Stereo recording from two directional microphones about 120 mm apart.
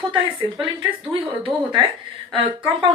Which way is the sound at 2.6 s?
40° right (ahead or behind).